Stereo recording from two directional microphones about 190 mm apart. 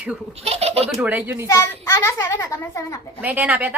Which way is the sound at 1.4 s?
15° left (ahead or behind).